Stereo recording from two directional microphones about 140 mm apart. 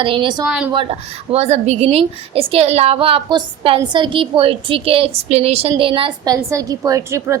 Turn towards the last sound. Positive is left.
turn(degrees=-20)  # may be behind; listen again after turning